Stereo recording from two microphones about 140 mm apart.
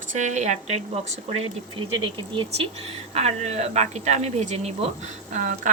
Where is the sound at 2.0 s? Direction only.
40° right (ahead or behind); by 5.6 s 65° right (ahead or behind).